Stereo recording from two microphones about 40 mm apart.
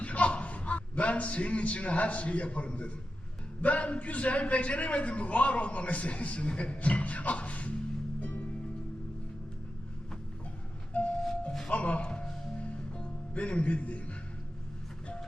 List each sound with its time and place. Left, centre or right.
0.0 s a man's voice: left
8.2 s music: left
10.9 s train: left
11.7 s a man's voice: left
12.0 s music: left